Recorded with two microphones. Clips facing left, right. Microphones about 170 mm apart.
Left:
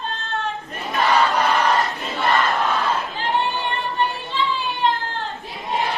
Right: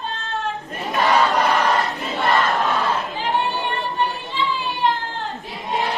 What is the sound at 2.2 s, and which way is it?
Crowd, centre (ahead or behind).